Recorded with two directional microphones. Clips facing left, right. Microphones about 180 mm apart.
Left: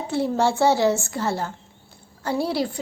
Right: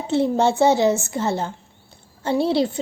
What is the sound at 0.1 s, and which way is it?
A woman's voice, 20° right (ahead or behind).